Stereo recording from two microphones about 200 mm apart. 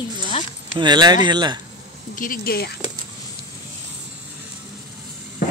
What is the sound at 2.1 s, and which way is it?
Speech, 45° left (ahead or behind).